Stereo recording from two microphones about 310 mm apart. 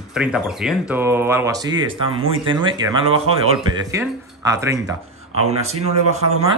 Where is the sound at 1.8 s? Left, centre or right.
Right.